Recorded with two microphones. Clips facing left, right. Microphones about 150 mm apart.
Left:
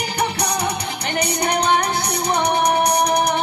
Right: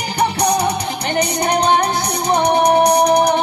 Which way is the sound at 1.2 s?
25° right (ahead or behind).